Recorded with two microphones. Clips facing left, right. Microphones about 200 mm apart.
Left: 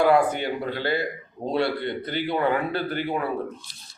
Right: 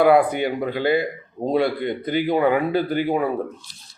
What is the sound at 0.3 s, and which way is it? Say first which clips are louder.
A man's voice: right 4 dB; 15° right (ahead or behind).